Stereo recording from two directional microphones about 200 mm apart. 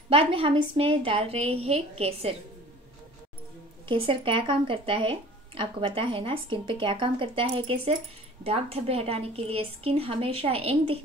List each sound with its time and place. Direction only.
0.1 s speech: 25° right (ahead or behind)
3.9 s speech: 25° right (ahead or behind)